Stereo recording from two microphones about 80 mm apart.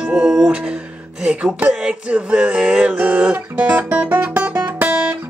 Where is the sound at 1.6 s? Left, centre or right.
Centre.